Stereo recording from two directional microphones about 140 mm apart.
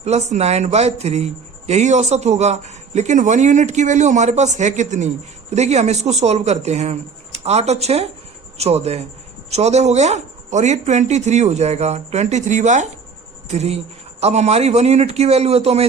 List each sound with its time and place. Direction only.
0.0 s speech: 50° right (ahead or behind)